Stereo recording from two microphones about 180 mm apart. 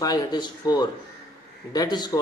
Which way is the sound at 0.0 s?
25° left (ahead or behind).